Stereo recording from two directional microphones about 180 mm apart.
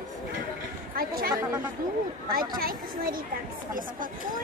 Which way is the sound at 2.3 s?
55° right (ahead or behind).